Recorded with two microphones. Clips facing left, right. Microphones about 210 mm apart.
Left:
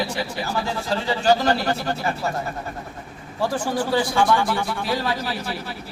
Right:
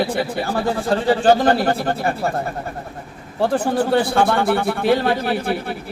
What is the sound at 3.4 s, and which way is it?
A man's voice, 60° right (ahead or behind).